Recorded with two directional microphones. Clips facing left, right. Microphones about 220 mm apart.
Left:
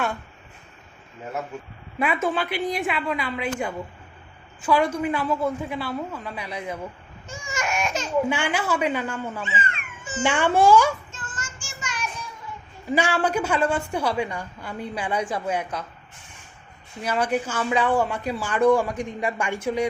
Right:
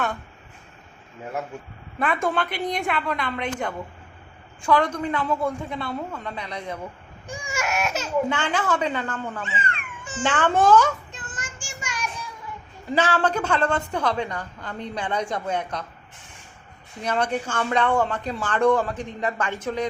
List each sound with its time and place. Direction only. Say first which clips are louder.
2.0 s speech: even; 5° left (ahead or behind)
7.3 s baby cry: right 1 dB; 15° right (ahead or behind)
8.3 s speech: even; 10° left (ahead or behind)
11.1 s child singing: even; 20° right (ahead or behind)
12.9 s speech: even; 10° left (ahead or behind)
17.0 s speech: left 1 dB; 5° left (ahead or behind)